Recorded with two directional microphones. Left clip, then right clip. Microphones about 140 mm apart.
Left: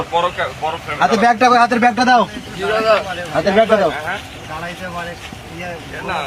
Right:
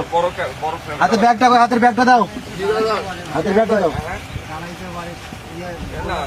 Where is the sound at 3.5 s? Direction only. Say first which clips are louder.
Left 3 dB; 40° left (ahead or behind).